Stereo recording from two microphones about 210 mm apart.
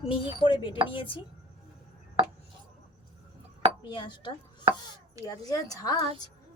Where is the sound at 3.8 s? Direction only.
20° left (ahead or behind).